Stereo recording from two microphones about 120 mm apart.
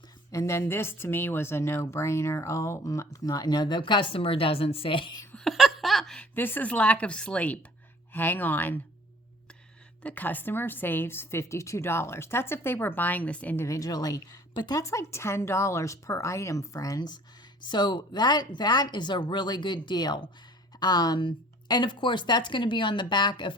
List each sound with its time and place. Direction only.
0.3 s speech: 25° left (ahead or behind); by 5.1 s 45° left (ahead or behind)
5.3 s laughter: centre (ahead or behind)
6.3 s a woman's voice: 15° left (ahead or behind)
10.0 s a woman's voice: 15° left (ahead or behind)
13.7 s a woman's voice: 30° left (ahead or behind)